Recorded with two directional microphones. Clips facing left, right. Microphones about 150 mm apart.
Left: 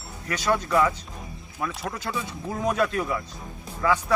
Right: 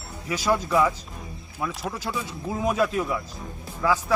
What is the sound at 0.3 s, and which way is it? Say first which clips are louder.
A man's voice: right 1 dB; 5° right (ahead or behind).